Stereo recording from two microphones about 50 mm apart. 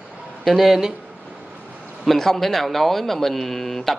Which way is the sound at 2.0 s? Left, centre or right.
Centre.